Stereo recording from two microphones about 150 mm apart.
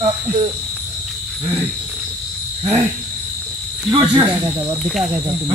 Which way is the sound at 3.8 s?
25° right (ahead or behind).